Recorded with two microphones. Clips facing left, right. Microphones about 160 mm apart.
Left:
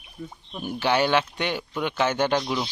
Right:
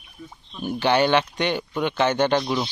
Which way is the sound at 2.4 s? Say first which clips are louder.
Right 3 dB; 5° right (ahead or behind).